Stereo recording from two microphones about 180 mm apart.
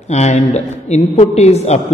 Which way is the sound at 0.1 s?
40° left (ahead or behind).